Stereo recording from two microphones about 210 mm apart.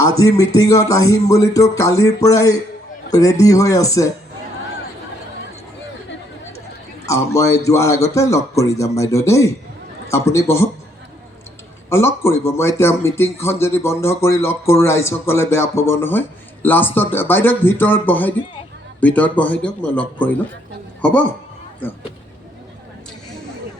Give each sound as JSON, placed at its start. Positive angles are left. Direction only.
{"t": 0.0, "sound": "speech", "side_deg": 15}
{"t": 7.0, "sound": "speech", "side_deg": 15}
{"t": 11.9, "sound": "speech", "side_deg": 10}